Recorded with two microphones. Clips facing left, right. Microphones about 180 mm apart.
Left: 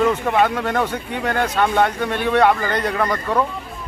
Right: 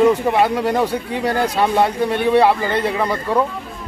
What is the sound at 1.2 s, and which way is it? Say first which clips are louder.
Speech: right 2 dB; 35° right (ahead or behind).